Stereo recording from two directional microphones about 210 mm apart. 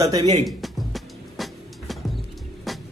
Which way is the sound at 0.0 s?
15° right (ahead or behind).